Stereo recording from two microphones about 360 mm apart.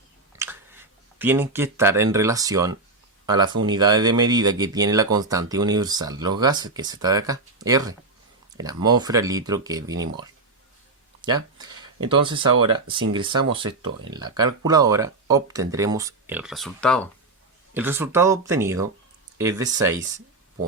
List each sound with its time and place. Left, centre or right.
0.3 s a sound: centre
1.2 s speech: centre
11.5 s speech: centre